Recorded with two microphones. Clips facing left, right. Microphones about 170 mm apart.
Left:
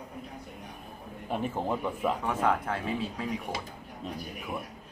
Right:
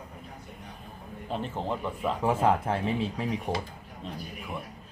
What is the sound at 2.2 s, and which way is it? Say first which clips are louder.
Speech: right 3 dB; 30° right (ahead or behind).